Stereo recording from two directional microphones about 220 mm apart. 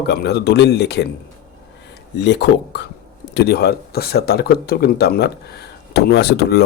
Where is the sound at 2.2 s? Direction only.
50° left (ahead or behind).